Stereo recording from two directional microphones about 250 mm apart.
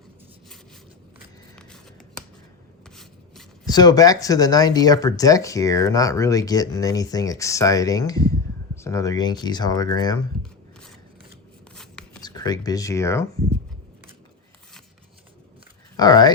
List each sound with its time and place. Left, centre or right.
1.5 s a sound: centre
2.9 s rub: centre
3.7 s speech: centre
11.7 s a sound: centre
12.2 s speech: centre
16.0 s speech: centre